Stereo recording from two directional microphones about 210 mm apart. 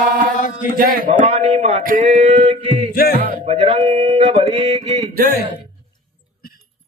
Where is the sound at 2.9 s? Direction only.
45° left (ahead or behind).